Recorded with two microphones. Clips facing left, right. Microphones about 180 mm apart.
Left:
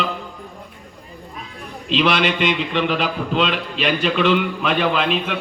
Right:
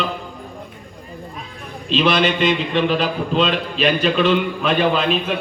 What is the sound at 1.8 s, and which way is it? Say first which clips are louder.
A man's voice: right 1 dB; 30° right (ahead or behind).